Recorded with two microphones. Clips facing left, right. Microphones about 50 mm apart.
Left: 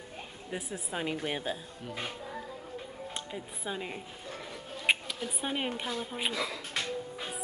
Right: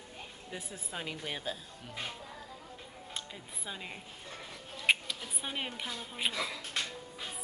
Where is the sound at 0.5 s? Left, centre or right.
Centre.